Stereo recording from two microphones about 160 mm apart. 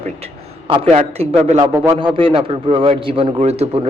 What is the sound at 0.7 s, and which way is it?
A man's voice, 40° right (ahead or behind).